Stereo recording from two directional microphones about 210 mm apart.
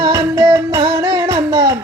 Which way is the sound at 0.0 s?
20° right (ahead or behind).